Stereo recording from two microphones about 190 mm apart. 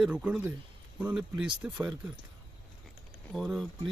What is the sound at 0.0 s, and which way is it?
Speech, 5° right (ahead or behind).